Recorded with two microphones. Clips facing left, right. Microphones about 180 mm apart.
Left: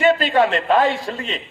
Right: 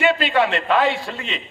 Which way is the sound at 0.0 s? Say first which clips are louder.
Left 3 dB; 45° left (ahead or behind).